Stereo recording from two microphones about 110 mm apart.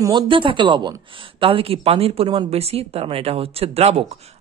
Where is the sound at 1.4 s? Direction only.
55° right (ahead or behind).